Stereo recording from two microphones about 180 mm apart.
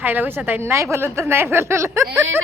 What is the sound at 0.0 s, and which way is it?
A woman's voice, 10° right (ahead or behind).